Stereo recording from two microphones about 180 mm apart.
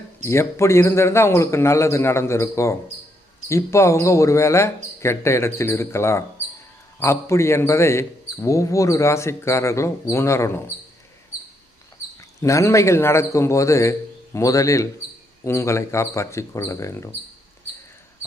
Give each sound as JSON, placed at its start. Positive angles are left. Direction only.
{"t": 0.3, "sound": "speech", "side_deg": 15}
{"t": 12.4, "sound": "speech", "side_deg": 15}